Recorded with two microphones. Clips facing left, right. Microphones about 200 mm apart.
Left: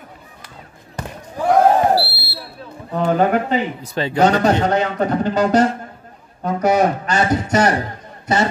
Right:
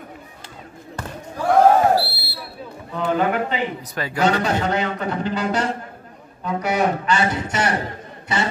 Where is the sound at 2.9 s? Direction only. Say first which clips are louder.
Left 4 dB; 40° left (ahead or behind).